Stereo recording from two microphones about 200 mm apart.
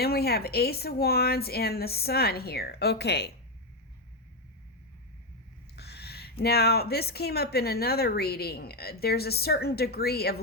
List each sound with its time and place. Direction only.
0.0 s a woman's voice: 50° left (ahead or behind)
5.7 s owl: 55° left (ahead or behind)
6.4 s a woman's voice: 50° left (ahead or behind)